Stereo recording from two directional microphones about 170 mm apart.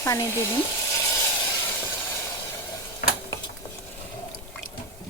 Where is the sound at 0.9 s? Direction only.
20° left (ahead or behind).